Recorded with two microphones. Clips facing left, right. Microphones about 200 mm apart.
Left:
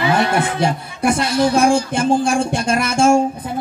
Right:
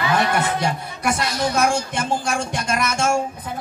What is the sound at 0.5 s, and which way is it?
Speech, 30° left (ahead or behind).